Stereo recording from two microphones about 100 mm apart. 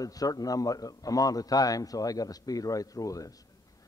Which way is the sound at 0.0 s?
40° left (ahead or behind).